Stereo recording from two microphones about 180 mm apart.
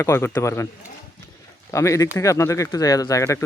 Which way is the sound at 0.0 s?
15° left (ahead or behind).